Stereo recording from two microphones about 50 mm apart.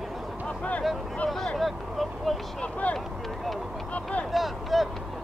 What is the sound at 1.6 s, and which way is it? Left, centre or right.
Vehicle, centre.